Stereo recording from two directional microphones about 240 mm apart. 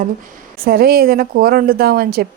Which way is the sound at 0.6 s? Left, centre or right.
Right.